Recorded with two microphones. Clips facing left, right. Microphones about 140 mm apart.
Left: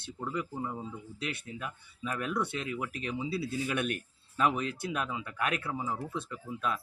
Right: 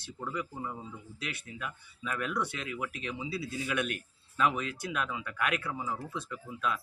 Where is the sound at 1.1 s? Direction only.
35° left (ahead or behind).